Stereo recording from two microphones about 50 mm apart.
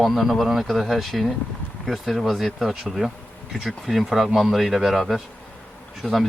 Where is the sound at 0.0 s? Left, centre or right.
Centre.